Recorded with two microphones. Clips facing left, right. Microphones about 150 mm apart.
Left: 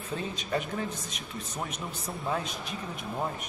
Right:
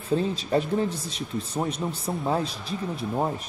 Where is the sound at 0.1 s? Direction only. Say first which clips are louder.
Right 9 dB; 30° right (ahead or behind).